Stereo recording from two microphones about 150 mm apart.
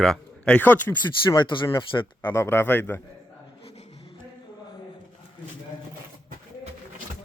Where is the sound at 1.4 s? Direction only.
30° left (ahead or behind).